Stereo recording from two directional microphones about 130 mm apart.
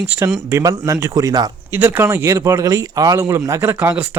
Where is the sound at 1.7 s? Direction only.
15° right (ahead or behind).